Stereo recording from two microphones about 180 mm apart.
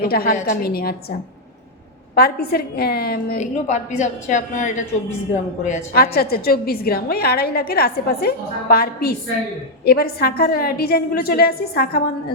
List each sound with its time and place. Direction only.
0.0 s a woman's voice: 55° left (ahead or behind)
2.1 s a woman's voice: 60° left (ahead or behind)
3.3 s a woman's voice: 40° left (ahead or behind); by 12.0 s 60° left (ahead or behind)